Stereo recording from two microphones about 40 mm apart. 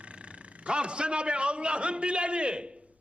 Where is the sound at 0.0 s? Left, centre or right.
Right.